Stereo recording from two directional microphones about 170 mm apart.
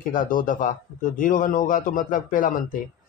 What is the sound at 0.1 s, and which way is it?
Speech, 50° left (ahead or behind).